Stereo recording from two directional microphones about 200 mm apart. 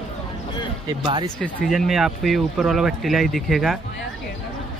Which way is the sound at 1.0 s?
25° right (ahead or behind).